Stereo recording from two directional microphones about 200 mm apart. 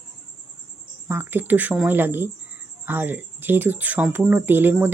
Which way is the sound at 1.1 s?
10° right (ahead or behind).